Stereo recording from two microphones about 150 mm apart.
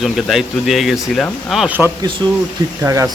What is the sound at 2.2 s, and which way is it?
Speech, 30° right (ahead or behind).